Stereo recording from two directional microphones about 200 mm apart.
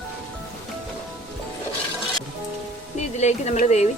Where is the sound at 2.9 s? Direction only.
35° left (ahead or behind).